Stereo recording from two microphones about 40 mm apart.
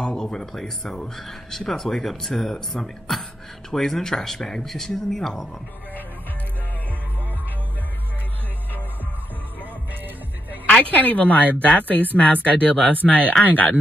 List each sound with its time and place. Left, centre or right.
0.0 s speech: centre
9.6 s music: right
10.7 s speech: left